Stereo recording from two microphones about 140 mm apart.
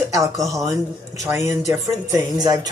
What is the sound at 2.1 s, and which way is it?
Speech, 25° right (ahead or behind).